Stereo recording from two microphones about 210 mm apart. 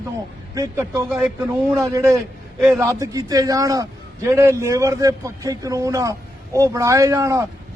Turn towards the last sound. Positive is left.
turn(degrees=-15)  # may be behind; listen again after turning